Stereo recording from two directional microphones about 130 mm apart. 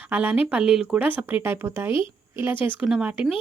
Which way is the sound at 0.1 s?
15° right (ahead or behind).